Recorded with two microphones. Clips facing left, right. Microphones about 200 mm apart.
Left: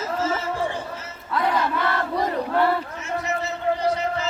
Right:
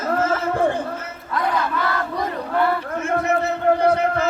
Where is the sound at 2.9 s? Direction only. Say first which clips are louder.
Right 7 dB; 55° right (ahead or behind).